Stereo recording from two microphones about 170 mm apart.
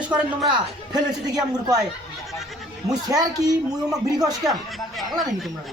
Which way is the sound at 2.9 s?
20° right (ahead or behind).